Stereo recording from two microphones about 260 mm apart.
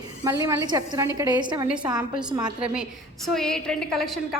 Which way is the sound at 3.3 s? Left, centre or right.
Centre.